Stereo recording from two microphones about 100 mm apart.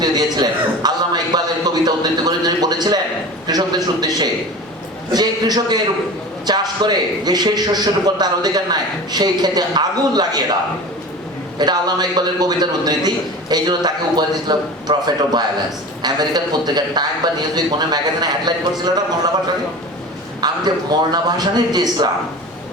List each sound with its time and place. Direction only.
0.0 s a sound: 45° right (ahead or behind)
3.4 s a man's voice: 40° right (ahead or behind)
20.4 s a man's voice: 45° right (ahead or behind)